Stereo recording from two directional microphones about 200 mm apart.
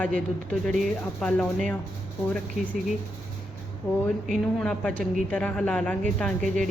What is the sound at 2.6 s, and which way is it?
Speech, 5° right (ahead or behind).